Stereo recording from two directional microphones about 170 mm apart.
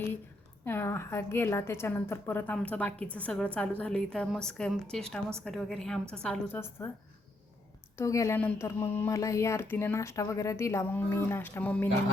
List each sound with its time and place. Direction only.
0.6 s a woman's voice: 15° left (ahead or behind)
6.2 s speech: 10° left (ahead or behind)
7.9 s a woman's voice: 20° left (ahead or behind)